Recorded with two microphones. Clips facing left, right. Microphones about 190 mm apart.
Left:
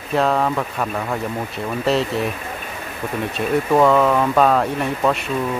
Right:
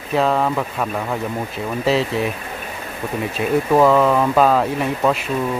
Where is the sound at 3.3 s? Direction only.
Centre (ahead or behind).